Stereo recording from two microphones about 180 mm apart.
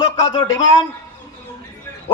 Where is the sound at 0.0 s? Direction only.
25° left (ahead or behind).